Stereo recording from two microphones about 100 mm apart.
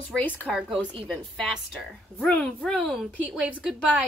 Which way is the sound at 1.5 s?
5° right (ahead or behind).